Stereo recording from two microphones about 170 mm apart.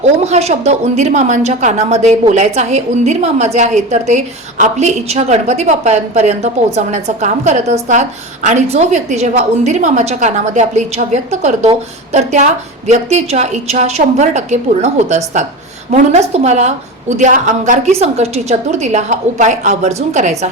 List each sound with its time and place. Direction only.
0.0 s a woman's voice: 40° right (ahead or behind)